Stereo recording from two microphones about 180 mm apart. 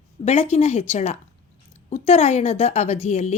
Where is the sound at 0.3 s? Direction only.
35° left (ahead or behind).